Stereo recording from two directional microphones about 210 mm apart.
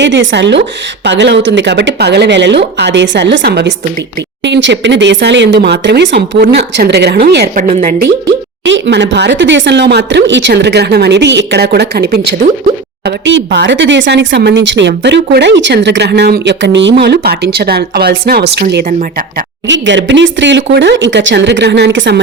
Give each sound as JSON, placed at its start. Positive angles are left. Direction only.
{"t": 0.0, "sound": "speech", "side_deg": -60}
{"t": 7.5, "sound": "a woman's voice", "side_deg": -35}
{"t": 8.6, "sound": "speech", "side_deg": -55}
{"t": 19.6, "sound": "speech", "side_deg": -60}